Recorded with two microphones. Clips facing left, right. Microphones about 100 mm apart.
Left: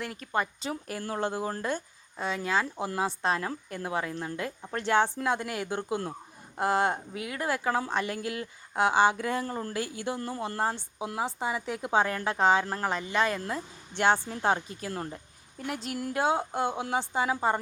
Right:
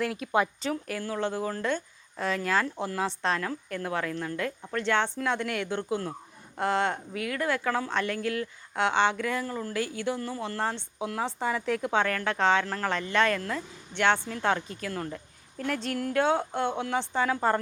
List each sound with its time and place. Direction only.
0.0 s speech: centre (ahead or behind)
0.9 s speech: 40° left (ahead or behind)
1.2 s a woman's voice: 15° left (ahead or behind)
8.8 s a woman's voice: 10° left (ahead or behind)
9.1 s a woman's voice: 25° left (ahead or behind); by 12.6 s 10° left (ahead or behind)
12.6 s a woman's voice: 20° left (ahead or behind)
13.3 s a woman's voice: 25° left (ahead or behind)